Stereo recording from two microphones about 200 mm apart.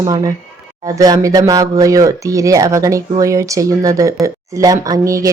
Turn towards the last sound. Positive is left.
turn(degrees=-15)  # may be behind; listen again after turning